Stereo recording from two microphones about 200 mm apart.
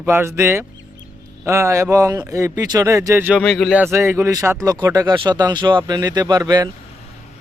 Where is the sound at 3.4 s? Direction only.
Centre (ahead or behind).